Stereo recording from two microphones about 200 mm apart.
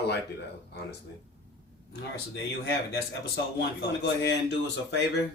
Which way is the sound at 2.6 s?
55° left (ahead or behind).